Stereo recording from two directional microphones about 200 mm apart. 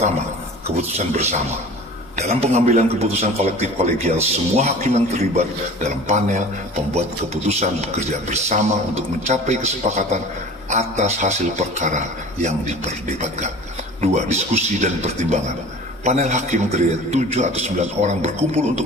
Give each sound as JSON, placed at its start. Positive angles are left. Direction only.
{"t": 0.8, "sound": "a man's voice", "side_deg": -35}
{"t": 7.4, "sound": "a man's voice", "side_deg": -35}